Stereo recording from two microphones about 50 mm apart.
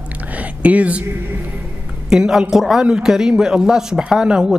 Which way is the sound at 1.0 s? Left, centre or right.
Right.